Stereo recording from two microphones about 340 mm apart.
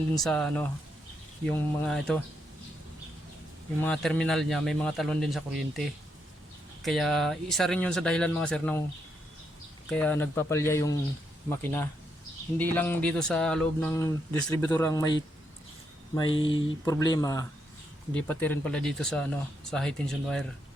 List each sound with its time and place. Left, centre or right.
0.2 s speech: centre
3.8 s speech: centre
9.9 s speech: centre
16.4 s speech: left
16.8 s speech: centre